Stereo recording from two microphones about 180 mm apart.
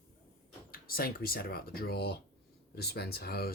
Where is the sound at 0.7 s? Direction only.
55° left (ahead or behind).